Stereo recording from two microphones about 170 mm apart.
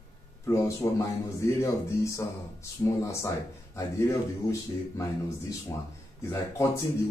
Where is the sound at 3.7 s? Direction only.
15° left (ahead or behind).